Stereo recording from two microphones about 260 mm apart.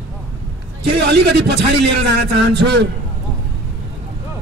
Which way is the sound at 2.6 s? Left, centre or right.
Right.